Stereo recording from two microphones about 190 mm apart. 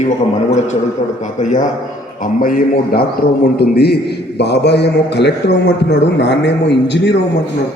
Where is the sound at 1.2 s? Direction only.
40° left (ahead or behind); by 7.2 s 65° left (ahead or behind).